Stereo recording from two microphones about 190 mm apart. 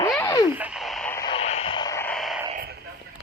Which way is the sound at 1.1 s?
15° left (ahead or behind).